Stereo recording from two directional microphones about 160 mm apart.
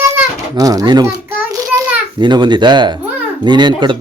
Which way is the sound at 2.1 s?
30° right (ahead or behind).